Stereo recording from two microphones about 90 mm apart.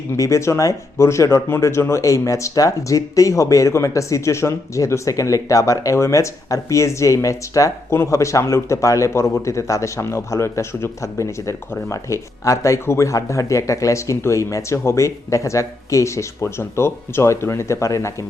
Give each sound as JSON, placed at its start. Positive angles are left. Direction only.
{"t": 0.2, "sound": "speech", "side_deg": 35}